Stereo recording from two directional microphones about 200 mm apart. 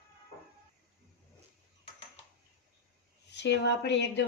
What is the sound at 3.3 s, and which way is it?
Speech, 60° left (ahead or behind).